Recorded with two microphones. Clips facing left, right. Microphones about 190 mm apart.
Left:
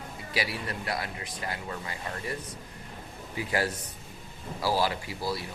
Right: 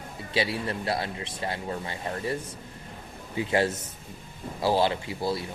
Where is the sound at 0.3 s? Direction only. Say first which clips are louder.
Right 5 dB; 25° right (ahead or behind).